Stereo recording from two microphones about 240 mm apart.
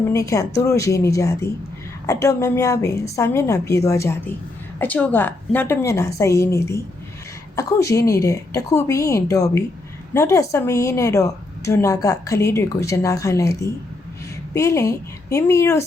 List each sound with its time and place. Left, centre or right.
0.1 s a woman's voice: centre